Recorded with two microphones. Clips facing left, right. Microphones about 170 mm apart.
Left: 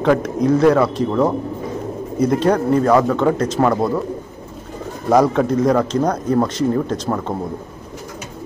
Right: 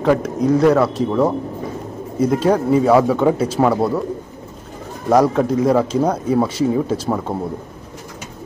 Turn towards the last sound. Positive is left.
turn(degrees=-5)  # may be behind; listen again after turning